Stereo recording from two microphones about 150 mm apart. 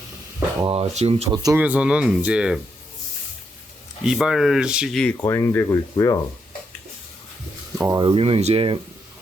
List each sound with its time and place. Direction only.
0.6 s speech: 40° right (ahead or behind)
1.5 s speech: 10° right (ahead or behind)
4.0 s speech: 5° right (ahead or behind)
5.2 s speech: 20° left (ahead or behind)
7.8 s speech: 20° right (ahead or behind)
8.0 s speech: 40° right (ahead or behind)